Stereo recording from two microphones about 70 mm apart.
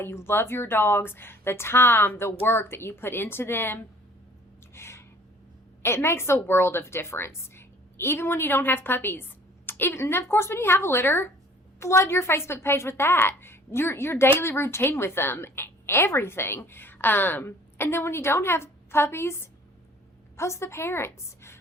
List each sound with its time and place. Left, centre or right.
0.0 s a woman's voice: left
4.7 s a sound: left
5.8 s a woman's voice: left